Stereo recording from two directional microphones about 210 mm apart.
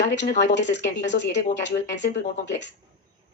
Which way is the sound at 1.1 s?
55° left (ahead or behind).